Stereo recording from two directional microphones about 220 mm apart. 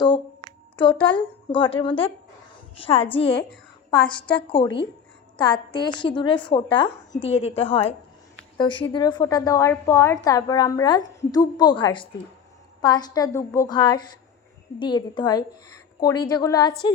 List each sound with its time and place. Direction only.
0.0 s a sound: 20° left (ahead or behind)
1.0 s a woman's voice: 20° left (ahead or behind)
4.3 s a woman's voice: 20° left (ahead or behind)